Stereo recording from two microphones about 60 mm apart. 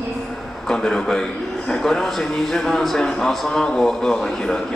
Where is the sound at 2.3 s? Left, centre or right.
Centre.